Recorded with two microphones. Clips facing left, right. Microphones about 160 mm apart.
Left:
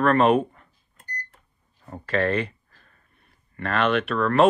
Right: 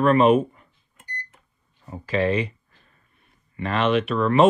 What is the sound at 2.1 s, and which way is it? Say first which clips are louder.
Speech: right 1 dB; centre (ahead or behind).